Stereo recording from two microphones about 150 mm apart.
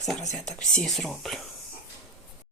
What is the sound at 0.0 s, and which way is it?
Speech, centre (ahead or behind).